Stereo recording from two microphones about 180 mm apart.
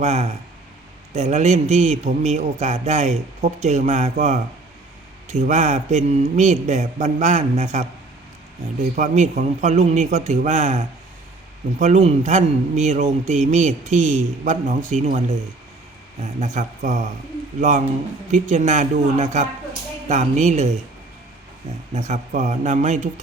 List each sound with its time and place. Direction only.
0.0 s speech: 40° right (ahead or behind)
5.3 s speech: 40° right (ahead or behind)
9.0 s a man's voice: 45° right (ahead or behind)
21.9 s speech: 40° right (ahead or behind)